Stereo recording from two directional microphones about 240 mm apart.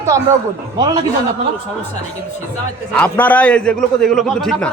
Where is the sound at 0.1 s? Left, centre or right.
Centre.